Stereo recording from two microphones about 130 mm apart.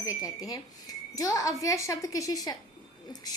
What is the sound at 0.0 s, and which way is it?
A woman's voice, 25° left (ahead or behind).